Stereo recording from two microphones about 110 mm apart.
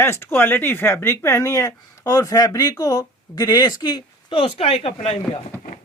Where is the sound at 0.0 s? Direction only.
20° left (ahead or behind).